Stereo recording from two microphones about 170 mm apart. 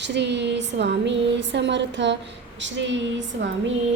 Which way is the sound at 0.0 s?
90° right.